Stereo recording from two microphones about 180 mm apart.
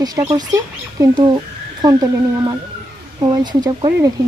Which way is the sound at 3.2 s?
25° right (ahead or behind).